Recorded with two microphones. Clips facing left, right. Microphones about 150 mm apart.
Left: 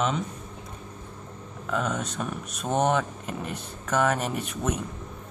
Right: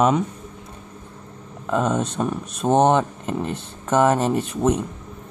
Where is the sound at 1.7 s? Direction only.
30° right (ahead or behind).